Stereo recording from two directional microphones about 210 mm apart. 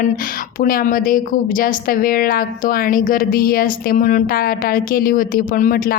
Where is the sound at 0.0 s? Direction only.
40° left (ahead or behind).